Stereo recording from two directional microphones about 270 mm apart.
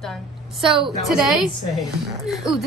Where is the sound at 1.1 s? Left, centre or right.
Centre.